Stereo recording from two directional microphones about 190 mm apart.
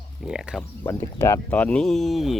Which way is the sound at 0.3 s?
5° right (ahead or behind).